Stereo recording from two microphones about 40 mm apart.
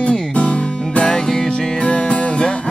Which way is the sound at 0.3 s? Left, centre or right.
Left.